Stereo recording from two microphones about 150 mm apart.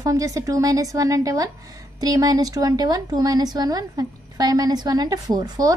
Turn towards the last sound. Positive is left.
turn(degrees=-25)  # may be behind; listen again after turning